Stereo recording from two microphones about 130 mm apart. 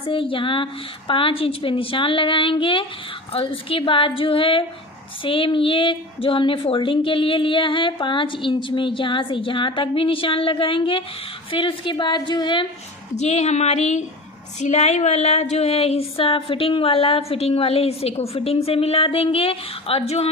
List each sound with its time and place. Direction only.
0.0 s speech: 40° left (ahead or behind)
13.1 s speech: 60° left (ahead or behind)